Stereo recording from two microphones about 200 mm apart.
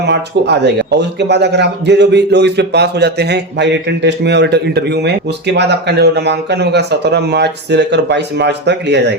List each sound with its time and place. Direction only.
0.0 s a man's voice: 60° right (ahead or behind)